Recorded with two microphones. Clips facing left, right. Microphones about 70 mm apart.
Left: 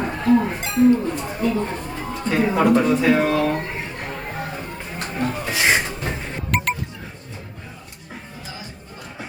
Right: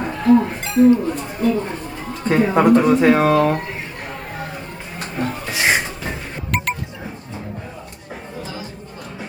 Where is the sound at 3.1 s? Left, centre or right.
Right.